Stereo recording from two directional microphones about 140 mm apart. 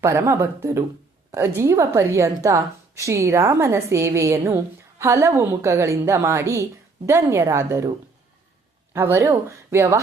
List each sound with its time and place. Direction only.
0.0 s a woman's voice: 20° right (ahead or behind)